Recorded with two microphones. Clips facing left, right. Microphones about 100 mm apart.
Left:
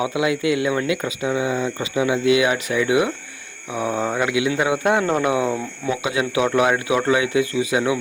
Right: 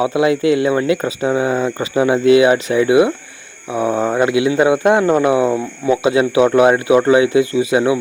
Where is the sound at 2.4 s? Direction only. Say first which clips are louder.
Right 7 dB; 30° right (ahead or behind).